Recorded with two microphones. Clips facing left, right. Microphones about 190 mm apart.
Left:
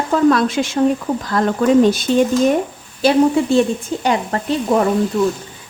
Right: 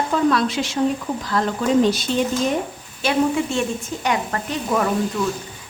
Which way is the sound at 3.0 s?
35° left (ahead or behind).